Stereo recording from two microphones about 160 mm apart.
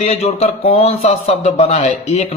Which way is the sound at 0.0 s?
40° left (ahead or behind).